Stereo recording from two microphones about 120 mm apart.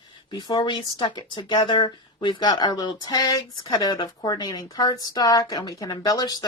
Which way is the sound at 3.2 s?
30° left (ahead or behind).